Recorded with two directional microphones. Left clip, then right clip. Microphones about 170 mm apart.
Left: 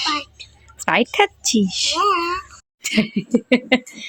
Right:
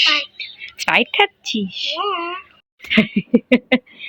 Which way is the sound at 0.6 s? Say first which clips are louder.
Right 2 dB; 30° left (ahead or behind).